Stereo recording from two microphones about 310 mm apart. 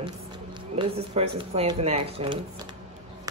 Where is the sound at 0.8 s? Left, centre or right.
Centre.